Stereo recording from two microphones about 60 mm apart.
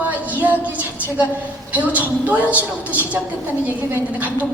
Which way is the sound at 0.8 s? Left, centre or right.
Right.